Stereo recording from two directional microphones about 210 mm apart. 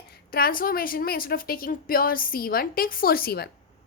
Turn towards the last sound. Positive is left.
turn(degrees=45)  # may be behind; listen again after turning